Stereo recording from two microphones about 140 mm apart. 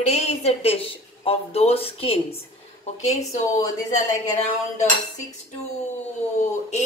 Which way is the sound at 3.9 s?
55° left (ahead or behind).